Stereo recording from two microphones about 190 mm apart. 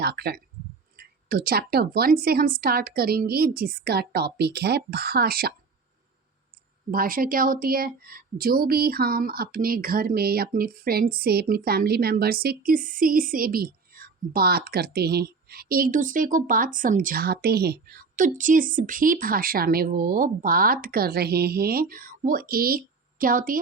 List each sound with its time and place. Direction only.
0.0 s a woman's voice: 55° right (ahead or behind)
6.9 s a woman's voice: 50° right (ahead or behind)